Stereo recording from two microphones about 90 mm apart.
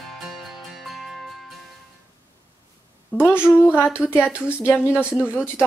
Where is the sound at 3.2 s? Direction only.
25° left (ahead or behind).